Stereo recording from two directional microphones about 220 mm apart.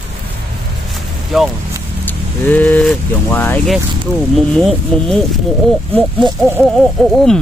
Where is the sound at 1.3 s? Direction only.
Centre (ahead or behind).